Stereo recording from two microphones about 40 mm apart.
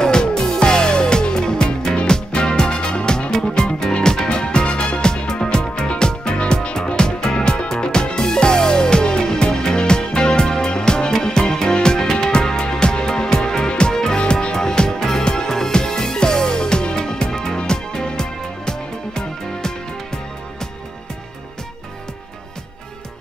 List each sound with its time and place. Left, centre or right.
0.0 s music: centre